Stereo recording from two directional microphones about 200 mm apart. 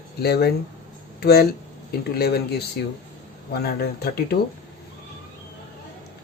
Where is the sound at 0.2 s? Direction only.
55° left (ahead or behind).